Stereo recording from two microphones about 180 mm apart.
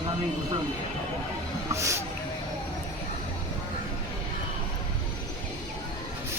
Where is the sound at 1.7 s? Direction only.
15° right (ahead or behind).